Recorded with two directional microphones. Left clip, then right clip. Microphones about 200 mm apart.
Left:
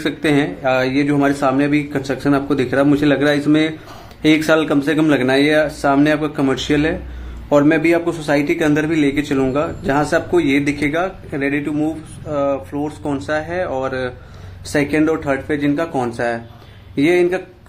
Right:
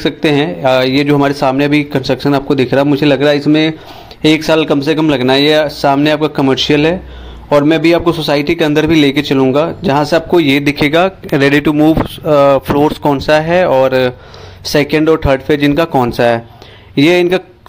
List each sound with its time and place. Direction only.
0.0 s a man's voice: 30° right (ahead or behind)